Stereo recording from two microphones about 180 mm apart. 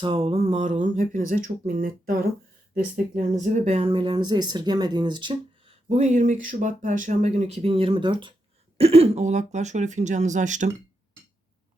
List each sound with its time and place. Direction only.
0.0 s speech: 30° right (ahead or behind); by 2.1 s 50° right (ahead or behind)
3.3 s speech: 40° right (ahead or behind)